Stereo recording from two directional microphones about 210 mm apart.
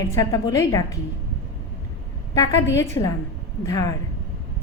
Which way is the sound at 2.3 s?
15° left (ahead or behind).